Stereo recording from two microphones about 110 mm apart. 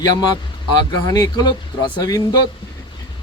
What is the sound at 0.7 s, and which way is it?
Speech, 40° left (ahead or behind).